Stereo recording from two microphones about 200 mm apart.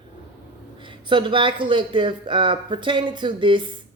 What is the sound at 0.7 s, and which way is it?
A woman's voice, 25° right (ahead or behind).